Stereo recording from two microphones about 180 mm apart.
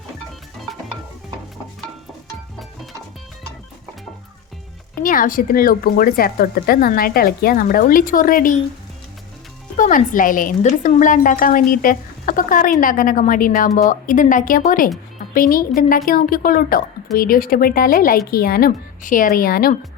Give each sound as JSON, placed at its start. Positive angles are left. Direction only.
{"t": 5.0, "sound": "speech", "side_deg": 50}
{"t": 9.7, "sound": "a woman's voice", "side_deg": 45}